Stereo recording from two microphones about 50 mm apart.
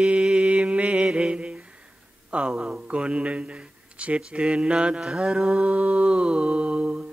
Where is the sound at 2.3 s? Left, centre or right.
Centre.